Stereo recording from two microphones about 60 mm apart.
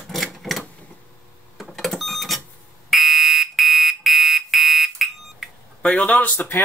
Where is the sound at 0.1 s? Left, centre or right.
Centre.